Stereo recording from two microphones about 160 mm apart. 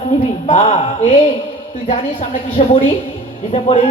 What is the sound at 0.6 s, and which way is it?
Speech, 35° left (ahead or behind).